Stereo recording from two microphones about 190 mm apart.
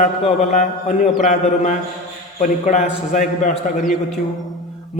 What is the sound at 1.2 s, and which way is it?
A man's voice, 40° left (ahead or behind).